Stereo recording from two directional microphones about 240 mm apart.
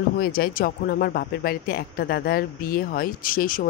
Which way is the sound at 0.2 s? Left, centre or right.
Left.